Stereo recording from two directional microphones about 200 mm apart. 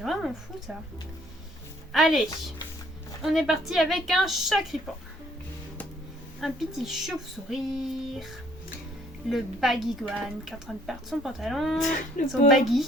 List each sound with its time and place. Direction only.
0.0 s a woman's voice: centre (ahead or behind)
1.9 s speech: centre (ahead or behind)
6.4 s speech: centre (ahead or behind)
9.3 s speech: centre (ahead or behind)
11.8 s speech: 40° left (ahead or behind)